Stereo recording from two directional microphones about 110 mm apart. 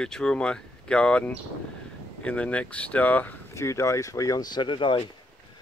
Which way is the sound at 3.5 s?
25° left (ahead or behind).